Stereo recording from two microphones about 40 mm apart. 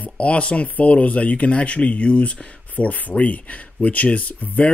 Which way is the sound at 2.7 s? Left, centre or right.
Left.